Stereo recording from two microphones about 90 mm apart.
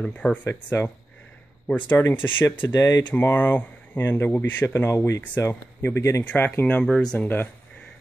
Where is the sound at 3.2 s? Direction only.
20° left (ahead or behind).